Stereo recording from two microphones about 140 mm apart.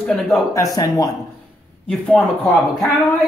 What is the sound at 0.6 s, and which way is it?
Speech, 25° left (ahead or behind).